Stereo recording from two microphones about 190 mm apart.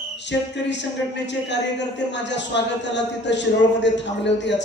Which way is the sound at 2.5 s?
65° left (ahead or behind).